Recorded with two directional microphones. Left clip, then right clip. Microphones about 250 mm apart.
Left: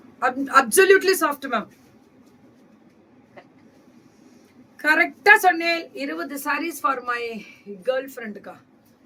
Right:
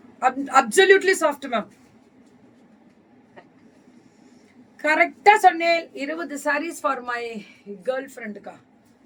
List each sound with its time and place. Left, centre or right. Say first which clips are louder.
0.2 s a woman's voice: even; centre
4.8 s a woman's voice: even; centre